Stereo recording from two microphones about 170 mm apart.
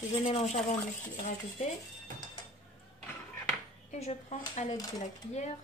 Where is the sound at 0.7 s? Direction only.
40° left (ahead or behind).